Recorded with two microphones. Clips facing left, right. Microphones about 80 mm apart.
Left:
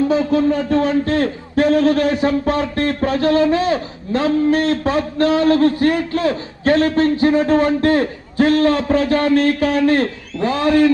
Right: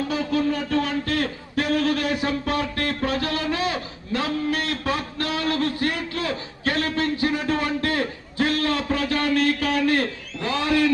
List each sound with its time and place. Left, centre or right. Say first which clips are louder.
0.1 s a man's voice: left 8 dB; left